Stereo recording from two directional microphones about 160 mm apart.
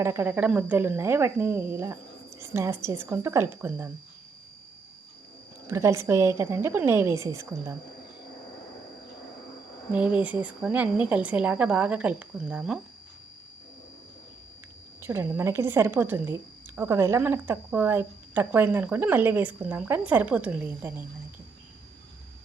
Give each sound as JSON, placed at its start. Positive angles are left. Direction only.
{"t": 0.0, "sound": "a woman's voice", "side_deg": -15}
{"t": 5.6, "sound": "a woman's voice", "side_deg": -15}
{"t": 9.9, "sound": "a woman's voice", "side_deg": -10}
{"t": 15.0, "sound": "a woman's voice", "side_deg": -15}